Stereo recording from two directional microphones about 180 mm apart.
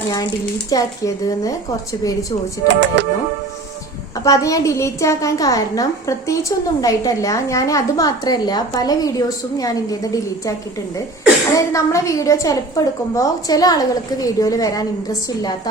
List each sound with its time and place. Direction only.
0.7 s a woman's voice: 20° left (ahead or behind)
2.6 s speech: 80° right
4.2 s a woman's voice: 20° left (ahead or behind)
11.5 s a woman's voice: 15° left (ahead or behind)